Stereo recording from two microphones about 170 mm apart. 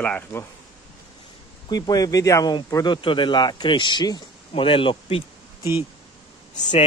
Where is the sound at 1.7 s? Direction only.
25° left (ahead or behind).